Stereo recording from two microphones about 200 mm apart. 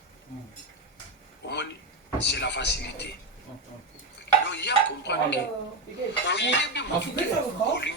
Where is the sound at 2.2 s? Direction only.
60° left (ahead or behind).